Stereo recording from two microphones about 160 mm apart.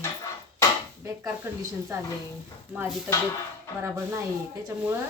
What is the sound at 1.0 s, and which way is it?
Speech, 15° right (ahead or behind).